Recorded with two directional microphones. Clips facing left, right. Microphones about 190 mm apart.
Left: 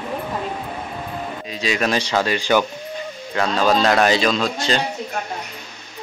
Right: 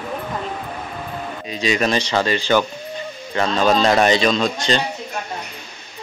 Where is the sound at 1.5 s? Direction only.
Centre (ahead or behind).